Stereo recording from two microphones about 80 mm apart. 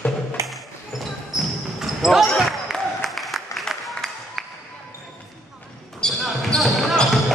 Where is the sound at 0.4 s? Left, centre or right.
Right.